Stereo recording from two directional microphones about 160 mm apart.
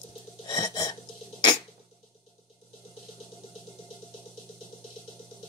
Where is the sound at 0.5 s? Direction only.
25° left (ahead or behind).